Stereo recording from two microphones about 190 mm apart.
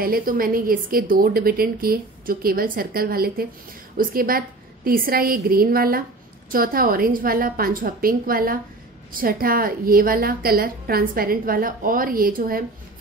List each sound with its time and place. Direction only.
0.0 s a woman's voice: 50° right (ahead or behind)